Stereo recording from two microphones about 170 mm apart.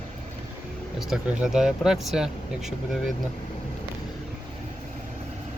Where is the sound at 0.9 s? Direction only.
5° right (ahead or behind).